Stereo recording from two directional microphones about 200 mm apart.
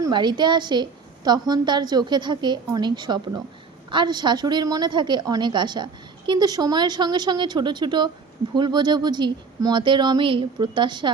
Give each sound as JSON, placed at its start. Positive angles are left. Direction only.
{"t": 0.0, "sound": "a woman's voice", "side_deg": -20}